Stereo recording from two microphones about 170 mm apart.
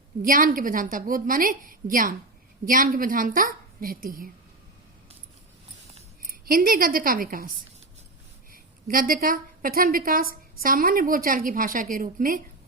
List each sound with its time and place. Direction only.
0.2 s a woman's voice: 55° right (ahead or behind)
6.2 s a woman's voice: 60° right (ahead or behind)
8.9 s a woman's voice: 55° right (ahead or behind)